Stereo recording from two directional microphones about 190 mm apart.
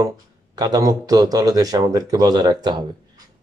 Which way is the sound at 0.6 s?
20° right (ahead or behind).